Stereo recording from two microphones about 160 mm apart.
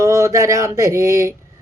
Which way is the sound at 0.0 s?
20° right (ahead or behind).